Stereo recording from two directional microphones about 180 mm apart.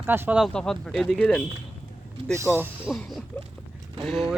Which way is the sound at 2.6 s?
5° right (ahead or behind).